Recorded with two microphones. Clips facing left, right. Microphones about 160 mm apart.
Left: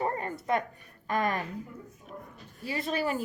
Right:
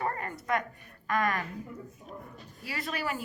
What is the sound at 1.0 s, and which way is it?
Speech, 30° left (ahead or behind).